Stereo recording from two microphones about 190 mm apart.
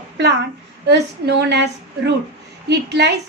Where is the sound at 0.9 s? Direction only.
65° right (ahead or behind).